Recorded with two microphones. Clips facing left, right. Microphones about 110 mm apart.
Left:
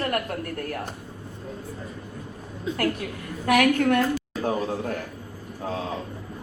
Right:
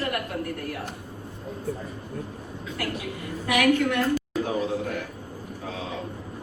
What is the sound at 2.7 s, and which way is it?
A woman's voice, 50° left (ahead or behind).